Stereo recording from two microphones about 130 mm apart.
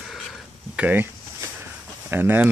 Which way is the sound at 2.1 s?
15° right (ahead or behind).